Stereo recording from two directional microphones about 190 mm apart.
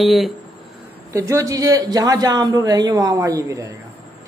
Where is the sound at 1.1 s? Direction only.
15° right (ahead or behind).